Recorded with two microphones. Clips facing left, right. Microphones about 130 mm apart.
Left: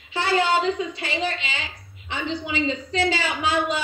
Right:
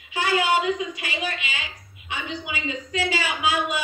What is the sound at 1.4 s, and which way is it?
Speech, 10° right (ahead or behind).